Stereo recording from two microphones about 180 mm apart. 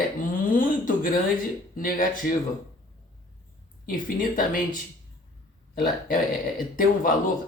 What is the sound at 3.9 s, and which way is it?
Speech, 50° left (ahead or behind).